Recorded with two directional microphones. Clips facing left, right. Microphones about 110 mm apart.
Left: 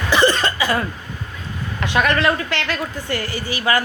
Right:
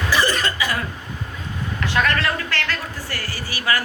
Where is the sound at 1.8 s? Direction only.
20° left (ahead or behind).